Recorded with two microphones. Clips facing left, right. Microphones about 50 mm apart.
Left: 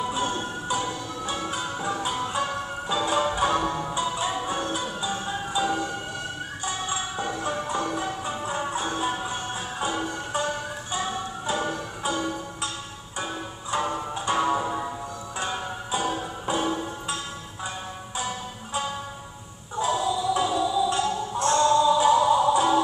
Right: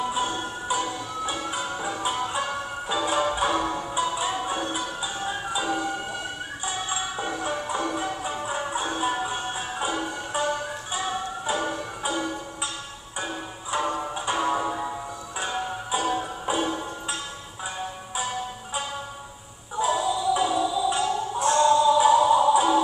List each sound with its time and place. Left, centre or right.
0.0 s music: centre
19.8 s music: centre